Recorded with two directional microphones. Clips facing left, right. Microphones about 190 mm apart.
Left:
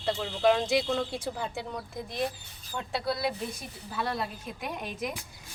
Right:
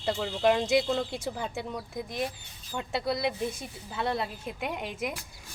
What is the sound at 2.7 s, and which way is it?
A woman's voice, 20° right (ahead or behind).